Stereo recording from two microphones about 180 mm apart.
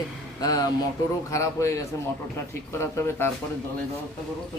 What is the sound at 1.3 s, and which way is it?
Speech, 15° left (ahead or behind).